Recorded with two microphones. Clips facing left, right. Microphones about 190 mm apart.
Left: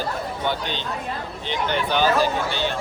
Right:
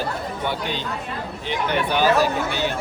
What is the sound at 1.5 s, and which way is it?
Speech, 5° right (ahead or behind).